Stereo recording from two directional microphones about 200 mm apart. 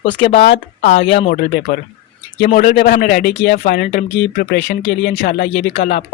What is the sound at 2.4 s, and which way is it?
Speech, 40° left (ahead or behind).